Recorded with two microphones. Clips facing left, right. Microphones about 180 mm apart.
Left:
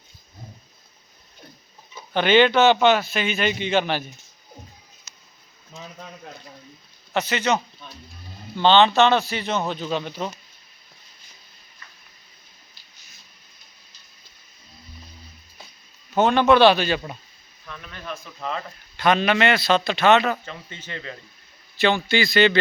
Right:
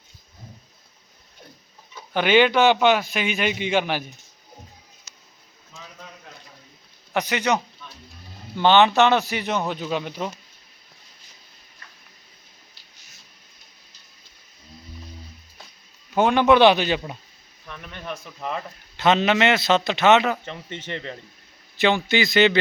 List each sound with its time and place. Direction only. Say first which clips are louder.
2.1 s a man's voice: left 1 dB; 10° right (ahead or behind)
7.1 s a man's voice: even; 15° right (ahead or behind)
16.1 s a man's voice: even; 15° right (ahead or behind)